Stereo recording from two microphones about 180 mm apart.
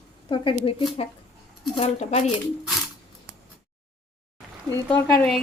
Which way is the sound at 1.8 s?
40° left (ahead or behind).